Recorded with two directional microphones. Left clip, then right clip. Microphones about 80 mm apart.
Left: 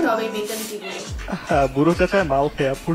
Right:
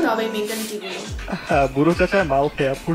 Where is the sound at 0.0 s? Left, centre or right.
Right.